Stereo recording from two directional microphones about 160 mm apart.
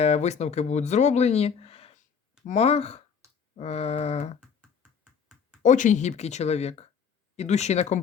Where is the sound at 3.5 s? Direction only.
40° left (ahead or behind).